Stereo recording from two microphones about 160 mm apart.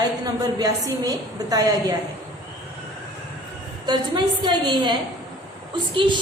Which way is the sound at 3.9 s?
30° right (ahead or behind).